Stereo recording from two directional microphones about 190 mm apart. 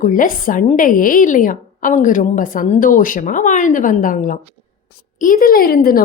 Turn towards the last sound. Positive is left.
turn(degrees=50)  # may be behind; listen again after turning